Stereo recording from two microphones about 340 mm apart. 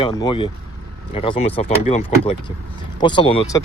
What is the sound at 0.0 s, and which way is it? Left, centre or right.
Speech, centre.